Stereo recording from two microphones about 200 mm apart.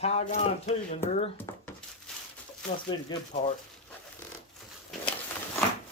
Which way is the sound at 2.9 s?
20° left (ahead or behind).